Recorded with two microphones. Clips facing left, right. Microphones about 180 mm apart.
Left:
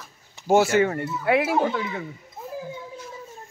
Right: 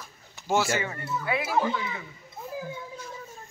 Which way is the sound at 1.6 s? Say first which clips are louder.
Left 4 dB; 55° left (ahead or behind).